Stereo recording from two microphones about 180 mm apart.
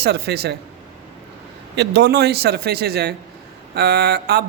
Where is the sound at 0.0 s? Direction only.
65° right (ahead or behind).